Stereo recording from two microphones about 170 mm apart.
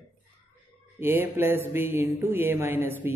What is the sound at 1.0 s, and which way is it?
Mantra, 15° right (ahead or behind).